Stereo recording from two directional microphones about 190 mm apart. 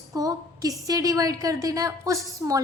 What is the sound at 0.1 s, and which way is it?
A woman's voice, 20° right (ahead or behind).